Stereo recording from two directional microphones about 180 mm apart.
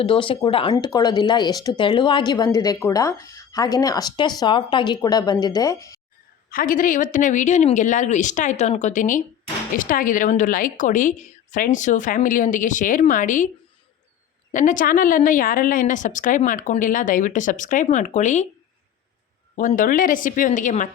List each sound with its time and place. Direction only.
0.0 s speech: 30° left (ahead or behind)
6.5 s a woman's voice: 50° left (ahead or behind)
14.5 s a woman's voice: 45° left (ahead or behind)
19.5 s a woman's voice: 45° left (ahead or behind)